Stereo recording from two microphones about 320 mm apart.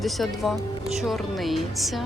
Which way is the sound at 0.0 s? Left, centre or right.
Centre.